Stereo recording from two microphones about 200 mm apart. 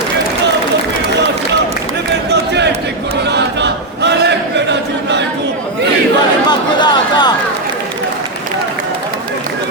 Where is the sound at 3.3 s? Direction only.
60° right (ahead or behind).